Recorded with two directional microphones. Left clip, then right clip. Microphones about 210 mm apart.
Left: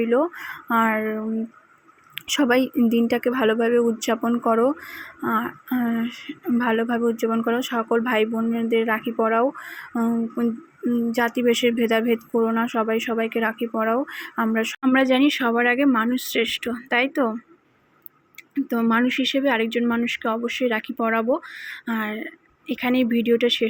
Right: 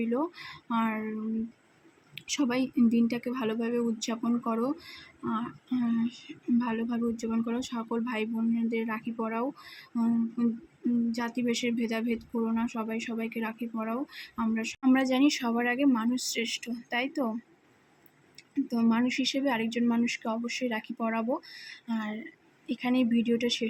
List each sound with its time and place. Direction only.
0.7 s speech: 10° left (ahead or behind)
2.2 s speech: 15° left (ahead or behind)
18.5 s speech: 10° left (ahead or behind)